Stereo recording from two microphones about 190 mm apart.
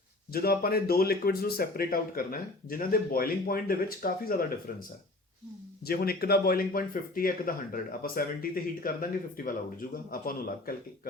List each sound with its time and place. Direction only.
0.3 s speech: 50° left (ahead or behind)
5.8 s speech: 55° left (ahead or behind)